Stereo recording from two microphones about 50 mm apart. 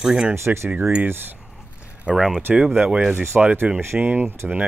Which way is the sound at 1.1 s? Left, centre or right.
Right.